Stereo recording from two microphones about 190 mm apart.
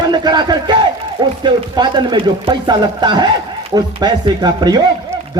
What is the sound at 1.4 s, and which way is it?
Speech, 25° right (ahead or behind).